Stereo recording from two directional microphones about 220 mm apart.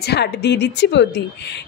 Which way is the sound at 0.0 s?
50° left (ahead or behind).